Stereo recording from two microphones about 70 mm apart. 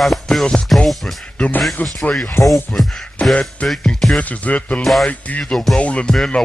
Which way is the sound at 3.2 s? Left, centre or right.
Centre.